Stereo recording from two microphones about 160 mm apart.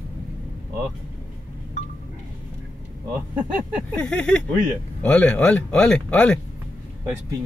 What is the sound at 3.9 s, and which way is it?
Speech, 5° left (ahead or behind).